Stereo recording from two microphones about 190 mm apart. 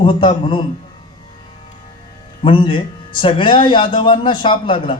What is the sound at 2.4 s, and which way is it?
A man's voice, 25° left (ahead or behind).